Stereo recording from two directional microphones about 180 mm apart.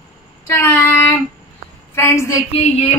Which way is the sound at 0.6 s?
15° left (ahead or behind).